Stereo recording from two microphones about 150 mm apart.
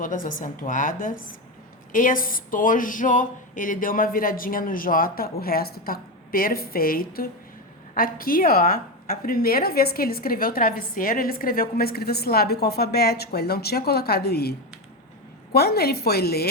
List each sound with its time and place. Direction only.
0.0 s a woman's voice: 65° left (ahead or behind); by 14.5 s 90° left
15.5 s a woman's voice: 90° left